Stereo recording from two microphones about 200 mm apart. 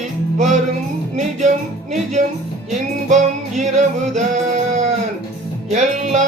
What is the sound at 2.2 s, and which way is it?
Music, 35° right (ahead or behind).